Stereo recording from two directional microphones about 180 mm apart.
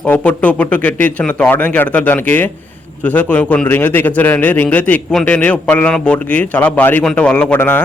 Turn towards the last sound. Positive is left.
turn(degrees=10)  # may be behind; listen again after turning